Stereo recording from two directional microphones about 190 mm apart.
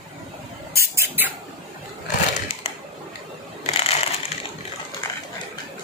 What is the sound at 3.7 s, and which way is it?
Crushing, 30° left (ahead or behind).